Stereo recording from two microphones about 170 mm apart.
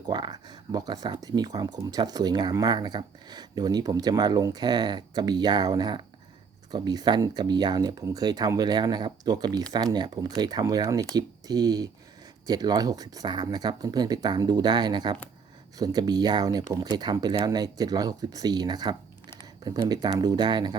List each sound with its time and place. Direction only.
0.1 s speech: 25° right (ahead or behind)